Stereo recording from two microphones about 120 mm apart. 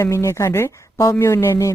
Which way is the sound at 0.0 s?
25° left (ahead or behind).